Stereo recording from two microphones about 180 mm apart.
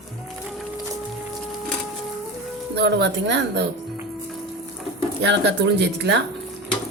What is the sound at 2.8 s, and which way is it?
Speech, 70° right (ahead or behind).